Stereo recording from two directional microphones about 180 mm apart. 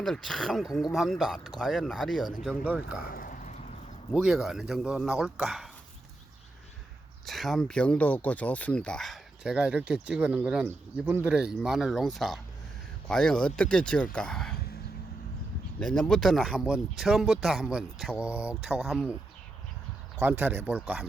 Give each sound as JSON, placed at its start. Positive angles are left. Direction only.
{"t": 0.0, "sound": "speech", "side_deg": 0}
{"t": 3.0, "sound": "a sound", "side_deg": 55}
{"t": 4.1, "sound": "speech", "side_deg": -5}
{"t": 7.3, "sound": "speech", "side_deg": 0}
{"t": 15.8, "sound": "speech", "side_deg": 5}
{"t": 20.2, "sound": "speech", "side_deg": -10}